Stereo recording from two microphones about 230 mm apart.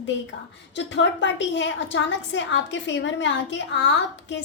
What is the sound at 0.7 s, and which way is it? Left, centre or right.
A woman's voice, left.